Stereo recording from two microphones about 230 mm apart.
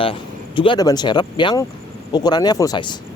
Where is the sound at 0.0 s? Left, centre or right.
Left.